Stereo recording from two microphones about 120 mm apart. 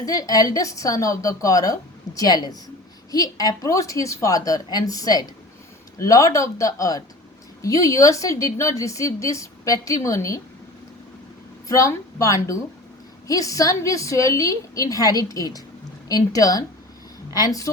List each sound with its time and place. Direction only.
0.0 s a woman's voice: 30° left (ahead or behind)
11.7 s a woman's voice: 25° left (ahead or behind)